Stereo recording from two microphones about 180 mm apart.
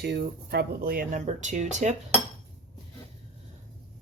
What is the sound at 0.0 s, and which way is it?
Speech, 65° right (ahead or behind).